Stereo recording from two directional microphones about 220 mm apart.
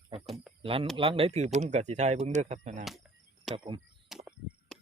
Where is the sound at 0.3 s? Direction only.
Centre (ahead or behind).